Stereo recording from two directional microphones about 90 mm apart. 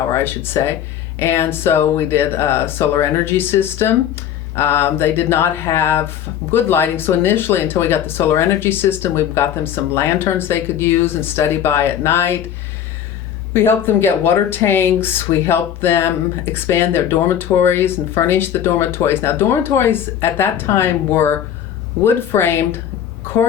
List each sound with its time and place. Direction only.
0.1 s speech: 25° left (ahead or behind)
13.5 s speech: 25° left (ahead or behind)